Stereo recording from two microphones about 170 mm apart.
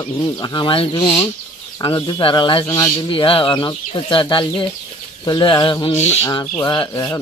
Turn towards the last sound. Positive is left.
turn(degrees=25)  # may be behind; listen again after turning